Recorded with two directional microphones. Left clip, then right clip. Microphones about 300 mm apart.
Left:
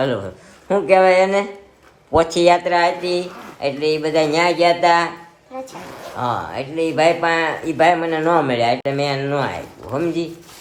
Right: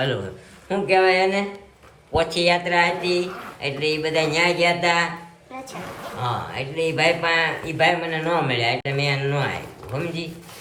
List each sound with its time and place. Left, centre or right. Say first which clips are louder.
0.7 s speech: left 5 dB; centre
6.1 s speech: left 5 dB; centre